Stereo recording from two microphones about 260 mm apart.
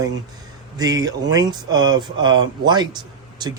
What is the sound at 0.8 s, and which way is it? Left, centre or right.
A man's voice, centre.